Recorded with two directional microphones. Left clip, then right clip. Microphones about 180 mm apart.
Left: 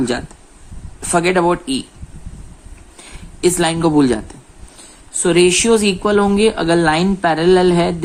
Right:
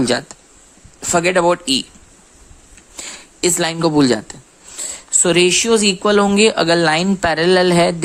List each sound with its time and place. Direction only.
0.0 s speech: 30° right (ahead or behind)
1.0 s speech: 20° right (ahead or behind)
3.4 s speech: 25° right (ahead or behind)